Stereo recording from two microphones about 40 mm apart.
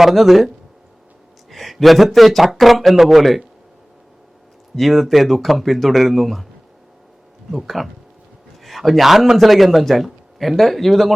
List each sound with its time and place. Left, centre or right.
0.0 s speech: centre
4.7 s speech: centre
7.5 s speech: centre